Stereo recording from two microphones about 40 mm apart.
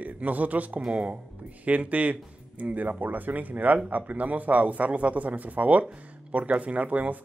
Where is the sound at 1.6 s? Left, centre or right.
Right.